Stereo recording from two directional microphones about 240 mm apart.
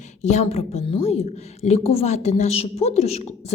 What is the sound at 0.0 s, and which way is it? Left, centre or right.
A woman's voice, left.